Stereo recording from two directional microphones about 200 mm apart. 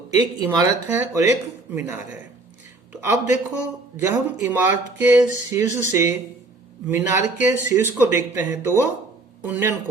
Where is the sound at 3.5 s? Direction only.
15° right (ahead or behind).